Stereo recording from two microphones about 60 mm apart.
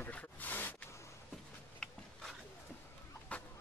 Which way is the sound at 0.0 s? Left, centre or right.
Left.